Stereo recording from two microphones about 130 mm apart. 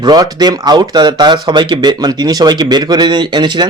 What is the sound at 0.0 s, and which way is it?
Speech, 30° right (ahead or behind).